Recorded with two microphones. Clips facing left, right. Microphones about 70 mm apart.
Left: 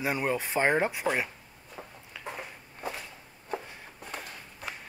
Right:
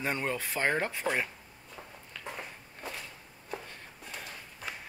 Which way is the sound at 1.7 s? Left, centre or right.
Centre.